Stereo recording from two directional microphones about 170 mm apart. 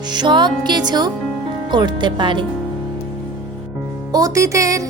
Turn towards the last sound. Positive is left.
turn(degrees=-20)  # may be behind; listen again after turning